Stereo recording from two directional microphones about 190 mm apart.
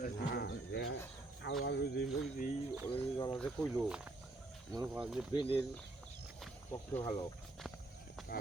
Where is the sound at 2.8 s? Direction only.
25° left (ahead or behind).